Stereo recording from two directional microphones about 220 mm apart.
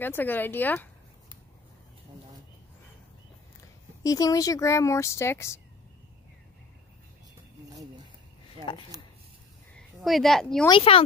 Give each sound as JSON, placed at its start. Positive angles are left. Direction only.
{"t": 0.0, "sound": "speech", "side_deg": 10}
{"t": 4.0, "sound": "speech", "side_deg": 15}
{"t": 10.0, "sound": "a woman's voice", "side_deg": 0}
{"t": 10.7, "sound": "speech", "side_deg": 25}